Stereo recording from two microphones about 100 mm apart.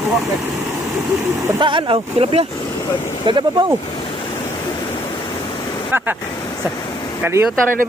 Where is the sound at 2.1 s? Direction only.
90° right.